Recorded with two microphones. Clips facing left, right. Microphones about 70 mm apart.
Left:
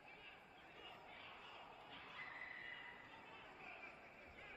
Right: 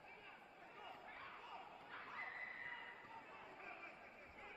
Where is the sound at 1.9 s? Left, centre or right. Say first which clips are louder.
Right 8 dB; right.